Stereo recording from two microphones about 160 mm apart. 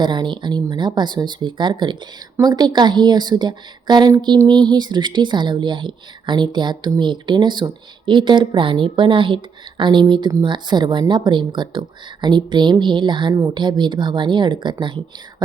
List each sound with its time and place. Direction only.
0.0 s a woman's voice: 30° right (ahead or behind)